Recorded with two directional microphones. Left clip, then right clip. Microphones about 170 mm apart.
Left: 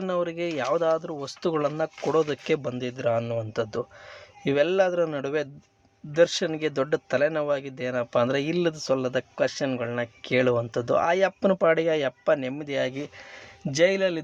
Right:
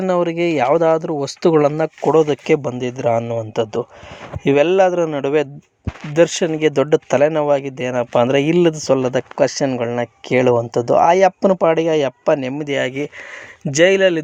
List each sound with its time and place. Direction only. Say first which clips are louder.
0.0 s speech: right 10 dB; 40° right (ahead or behind)
2.0 s speech: right 10 dB; 25° right (ahead or behind)